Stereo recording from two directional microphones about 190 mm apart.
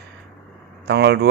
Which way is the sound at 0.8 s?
60° right (ahead or behind).